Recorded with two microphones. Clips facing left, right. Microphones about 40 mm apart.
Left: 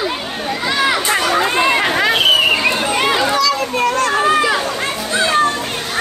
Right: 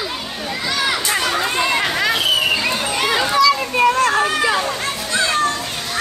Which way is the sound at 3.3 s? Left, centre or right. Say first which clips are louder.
Right 1 dB; centre.